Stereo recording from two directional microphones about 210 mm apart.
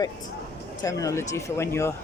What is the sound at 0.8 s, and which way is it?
Speech, 15° left (ahead or behind).